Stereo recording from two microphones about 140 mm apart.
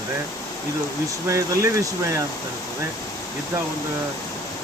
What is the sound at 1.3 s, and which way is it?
Speech, 20° right (ahead or behind).